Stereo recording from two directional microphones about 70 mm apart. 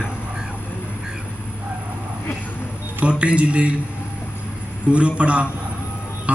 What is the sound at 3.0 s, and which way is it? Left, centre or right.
Speech, centre.